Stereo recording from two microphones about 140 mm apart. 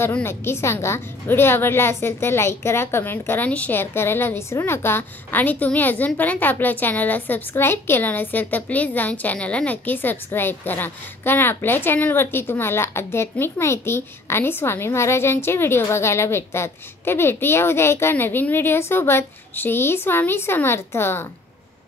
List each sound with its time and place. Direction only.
0.0 s a woman's voice: 15° left (ahead or behind)